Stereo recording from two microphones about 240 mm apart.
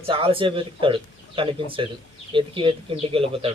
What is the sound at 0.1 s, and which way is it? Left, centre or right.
Speech, right.